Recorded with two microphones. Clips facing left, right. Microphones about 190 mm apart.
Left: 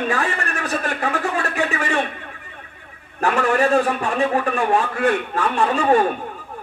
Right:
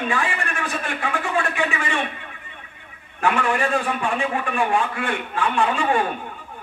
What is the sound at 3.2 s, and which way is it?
A man's voice, 40° left (ahead or behind).